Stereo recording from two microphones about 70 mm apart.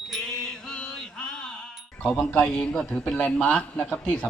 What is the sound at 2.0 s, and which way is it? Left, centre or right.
A man's voice, centre.